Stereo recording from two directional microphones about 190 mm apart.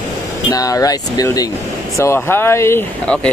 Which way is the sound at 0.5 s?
20° left (ahead or behind).